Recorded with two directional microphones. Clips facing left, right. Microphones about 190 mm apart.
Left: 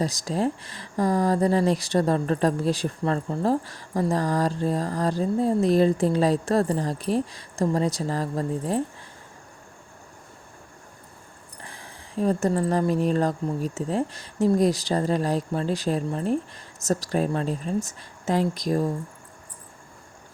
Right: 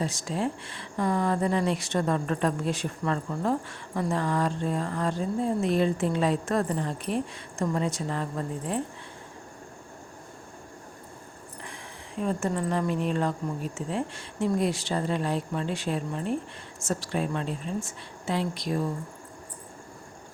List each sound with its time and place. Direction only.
0.0 s speech: 35° left (ahead or behind)
11.6 s speech: 35° left (ahead or behind)